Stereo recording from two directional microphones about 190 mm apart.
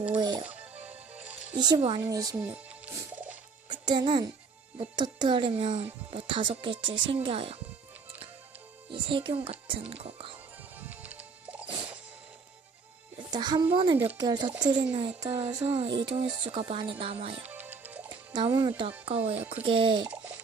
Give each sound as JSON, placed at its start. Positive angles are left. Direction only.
{"t": 0.2, "sound": "music", "side_deg": -20}
{"t": 0.4, "sound": "music", "side_deg": -5}
{"t": 1.5, "sound": "speech", "side_deg": -20}
{"t": 2.3, "sound": "music", "side_deg": -5}
{"t": 3.7, "sound": "speech", "side_deg": -25}
{"t": 8.9, "sound": "speech", "side_deg": -25}
{"t": 10.8, "sound": "music", "side_deg": -10}
{"t": 13.1, "sound": "a child's voice", "side_deg": -25}
{"t": 17.4, "sound": "music", "side_deg": -10}
{"t": 18.3, "sound": "speech", "side_deg": -20}
{"t": 20.1, "sound": "a sound", "side_deg": -10}